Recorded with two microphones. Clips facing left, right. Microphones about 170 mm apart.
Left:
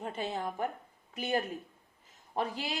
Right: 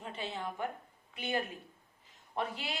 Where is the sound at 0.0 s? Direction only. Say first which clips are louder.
Left 4 dB; 45° left (ahead or behind).